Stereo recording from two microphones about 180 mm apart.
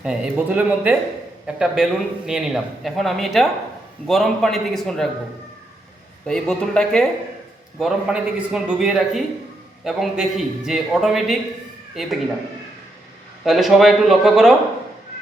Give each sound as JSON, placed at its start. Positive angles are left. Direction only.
{"t": 0.0, "sound": "a man's voice", "side_deg": -5}
{"t": 6.2, "sound": "a man's voice", "side_deg": 5}
{"t": 13.4, "sound": "a man's voice", "side_deg": 0}